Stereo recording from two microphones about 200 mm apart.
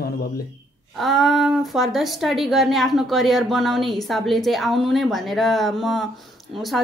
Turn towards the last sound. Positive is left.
turn(degrees=0)  # may be behind; listen again after turning